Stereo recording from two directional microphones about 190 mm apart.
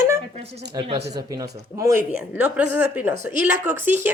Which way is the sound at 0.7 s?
25° right (ahead or behind).